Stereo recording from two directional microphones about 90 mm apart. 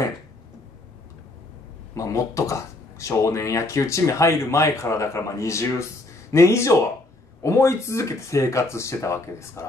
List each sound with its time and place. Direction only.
2.0 s speech: 35° left (ahead or behind)